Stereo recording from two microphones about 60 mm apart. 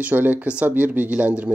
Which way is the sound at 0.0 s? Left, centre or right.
Right.